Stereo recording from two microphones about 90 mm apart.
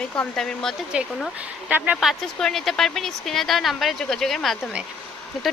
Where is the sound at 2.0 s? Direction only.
Centre (ahead or behind).